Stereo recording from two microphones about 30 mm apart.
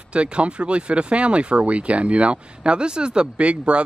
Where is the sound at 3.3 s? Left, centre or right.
Right.